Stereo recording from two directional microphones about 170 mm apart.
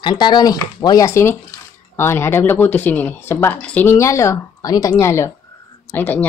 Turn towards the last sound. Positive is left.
turn(degrees=10)  # may be behind; listen again after turning